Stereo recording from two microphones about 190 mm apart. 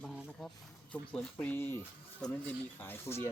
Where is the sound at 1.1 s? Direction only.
5° left (ahead or behind).